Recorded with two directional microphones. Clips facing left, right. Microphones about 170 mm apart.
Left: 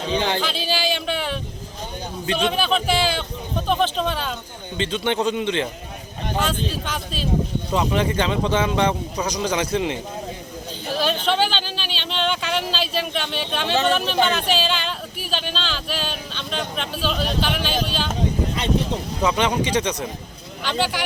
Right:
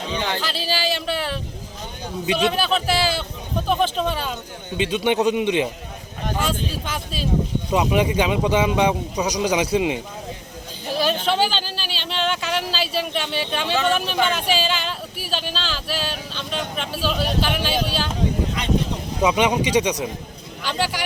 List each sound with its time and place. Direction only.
0.1 s speech: 20° left (ahead or behind)
0.7 s a sound: centre (ahead or behind)
2.2 s a man's voice: 10° right (ahead or behind)
11.3 s a sound: 5° right (ahead or behind)
13.8 s speech: 10° right (ahead or behind)
19.2 s speech: 15° right (ahead or behind)